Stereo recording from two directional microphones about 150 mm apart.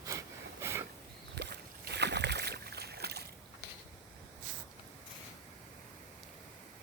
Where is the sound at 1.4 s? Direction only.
90° right.